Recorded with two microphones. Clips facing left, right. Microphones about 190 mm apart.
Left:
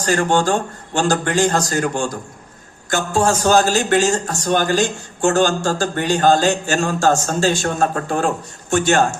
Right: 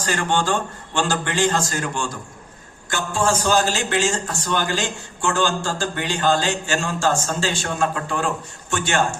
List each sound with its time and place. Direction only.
0.0 s a man's voice: 45° left (ahead or behind)